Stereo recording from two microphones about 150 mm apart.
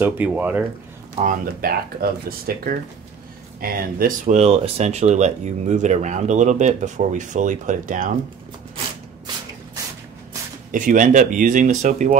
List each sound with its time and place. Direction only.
0.0 s speech: 10° right (ahead or behind)
1.1 s speech: 60° right (ahead or behind); by 4.1 s 75° right (ahead or behind)
4.3 s speech: 45° right (ahead or behind)
10.7 s speech: 65° right (ahead or behind)